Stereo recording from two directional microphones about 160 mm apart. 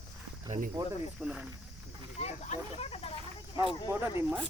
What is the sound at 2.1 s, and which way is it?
Snake, 45° left (ahead or behind).